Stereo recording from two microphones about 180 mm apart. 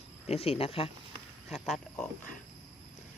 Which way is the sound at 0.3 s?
35° left (ahead or behind).